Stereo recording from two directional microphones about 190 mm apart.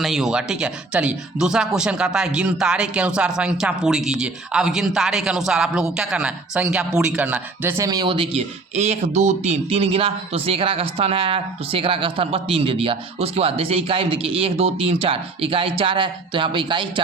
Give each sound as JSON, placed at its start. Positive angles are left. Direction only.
{"t": 0.0, "sound": "speech", "side_deg": 0}